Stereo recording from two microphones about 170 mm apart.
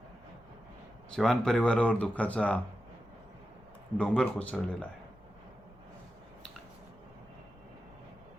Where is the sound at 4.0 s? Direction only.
5° left (ahead or behind).